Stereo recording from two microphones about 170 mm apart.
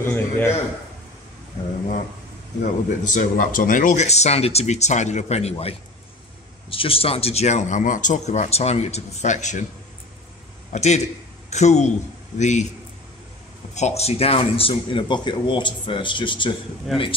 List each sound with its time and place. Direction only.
0.0 s a man's voice: 15° left (ahead or behind)
2.6 s speech: 50° left (ahead or behind)
10.7 s a man's voice: 40° left (ahead or behind)
13.7 s speech: 40° left (ahead or behind)